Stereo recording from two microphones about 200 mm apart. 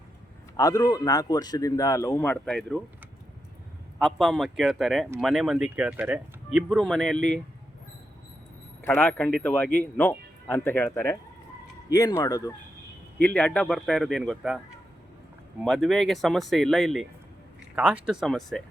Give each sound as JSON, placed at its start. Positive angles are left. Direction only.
{"t": 0.5, "sound": "a man's voice", "side_deg": 15}
{"t": 4.0, "sound": "speech", "side_deg": 0}
{"t": 8.8, "sound": "a man's voice", "side_deg": 10}
{"t": 13.2, "sound": "speech", "side_deg": 5}
{"t": 15.6, "sound": "speech", "side_deg": 0}